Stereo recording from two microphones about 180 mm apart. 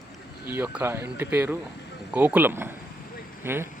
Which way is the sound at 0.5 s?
10° right (ahead or behind).